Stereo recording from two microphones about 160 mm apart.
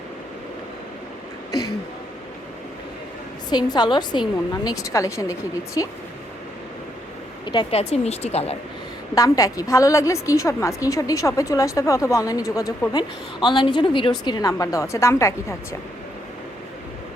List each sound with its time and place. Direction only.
1.5 s throat clearing: 25° left (ahead or behind)
3.5 s a woman's voice: 25° left (ahead or behind)
7.4 s a woman's voice: 30° left (ahead or behind)
9.1 s a woman's voice: 20° left (ahead or behind)